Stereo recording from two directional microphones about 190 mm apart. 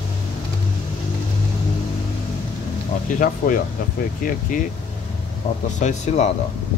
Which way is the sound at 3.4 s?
50° left (ahead or behind).